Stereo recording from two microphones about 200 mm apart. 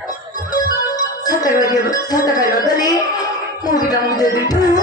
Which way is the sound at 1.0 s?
20° left (ahead or behind).